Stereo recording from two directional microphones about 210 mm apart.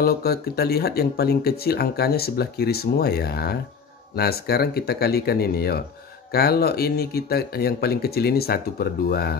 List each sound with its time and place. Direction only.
0.0 s speech: 45° left (ahead or behind)